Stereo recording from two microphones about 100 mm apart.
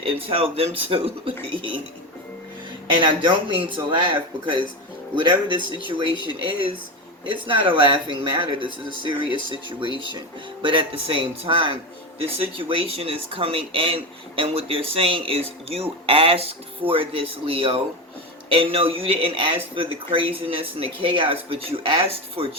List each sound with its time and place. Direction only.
0.0 s speech: 65° right (ahead or behind)
2.8 s speech: 55° right (ahead or behind)